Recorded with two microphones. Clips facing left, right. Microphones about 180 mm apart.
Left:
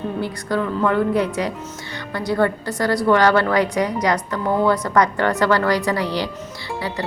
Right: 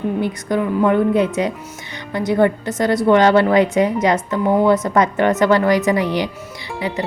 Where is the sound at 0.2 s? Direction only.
20° right (ahead or behind).